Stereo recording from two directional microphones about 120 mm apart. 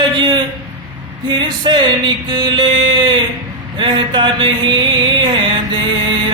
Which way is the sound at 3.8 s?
45° right (ahead or behind).